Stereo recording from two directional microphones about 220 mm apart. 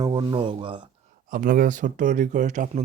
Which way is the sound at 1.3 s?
40° right (ahead or behind).